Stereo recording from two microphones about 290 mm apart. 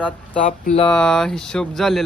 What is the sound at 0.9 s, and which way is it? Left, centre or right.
Mantra, centre.